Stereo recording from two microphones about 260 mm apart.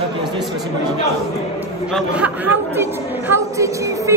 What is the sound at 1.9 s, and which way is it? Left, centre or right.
A woman's voice, centre.